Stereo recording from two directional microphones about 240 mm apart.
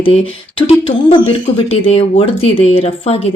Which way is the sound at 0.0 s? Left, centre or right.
Left.